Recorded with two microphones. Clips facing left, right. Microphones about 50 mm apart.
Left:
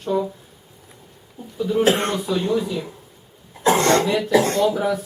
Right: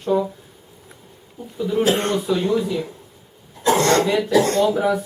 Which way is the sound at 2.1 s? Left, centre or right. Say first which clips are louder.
Right 2 dB; centre.